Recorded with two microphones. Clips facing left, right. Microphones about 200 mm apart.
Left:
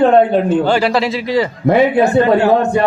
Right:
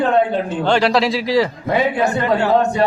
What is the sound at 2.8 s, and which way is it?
Speech, 55° left (ahead or behind).